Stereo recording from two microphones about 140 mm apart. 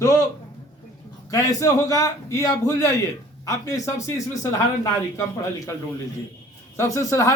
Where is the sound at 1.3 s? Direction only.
25° left (ahead or behind).